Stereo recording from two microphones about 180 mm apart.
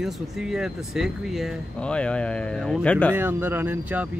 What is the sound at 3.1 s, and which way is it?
Speech, 10° right (ahead or behind).